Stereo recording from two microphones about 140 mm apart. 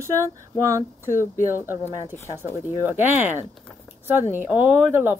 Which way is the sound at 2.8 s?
15° right (ahead or behind).